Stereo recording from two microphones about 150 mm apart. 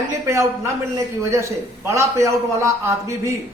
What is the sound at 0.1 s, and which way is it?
A man's voice, 20° right (ahead or behind).